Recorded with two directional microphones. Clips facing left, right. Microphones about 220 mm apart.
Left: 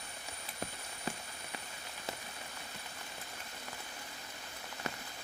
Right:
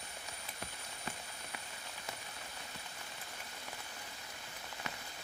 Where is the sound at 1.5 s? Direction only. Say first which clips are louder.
Left 4 dB; 30° left (ahead or behind).